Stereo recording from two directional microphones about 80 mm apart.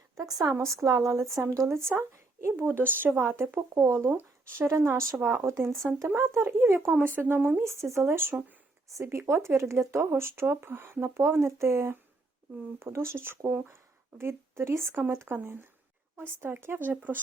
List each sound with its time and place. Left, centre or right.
0.2 s a woman's voice: right
0.5 s a woman's voice: right
4.1 s a woman's voice: right
7.6 s a woman's voice: right